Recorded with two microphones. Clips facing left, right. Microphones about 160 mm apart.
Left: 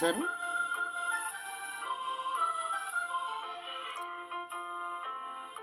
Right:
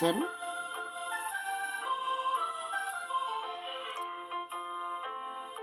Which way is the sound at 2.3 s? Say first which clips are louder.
Right 1 dB; 15° right (ahead or behind).